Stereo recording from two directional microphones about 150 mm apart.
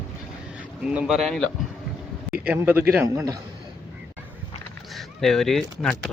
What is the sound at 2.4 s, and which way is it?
Speech, 10° right (ahead or behind).